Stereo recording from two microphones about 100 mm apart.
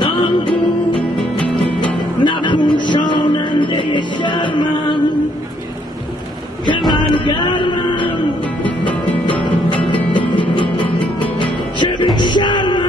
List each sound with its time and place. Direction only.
0.0 s music: 50° left (ahead or behind)
1.5 s music: 10° left (ahead or behind)
2.2 s music: 50° left (ahead or behind)
6.9 s music: 50° left (ahead or behind)
9.7 s music: 55° left (ahead or behind)
11.3 s music: 50° left (ahead or behind)